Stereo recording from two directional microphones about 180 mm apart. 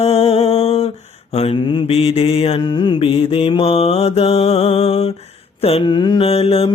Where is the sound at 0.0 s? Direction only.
35° left (ahead or behind).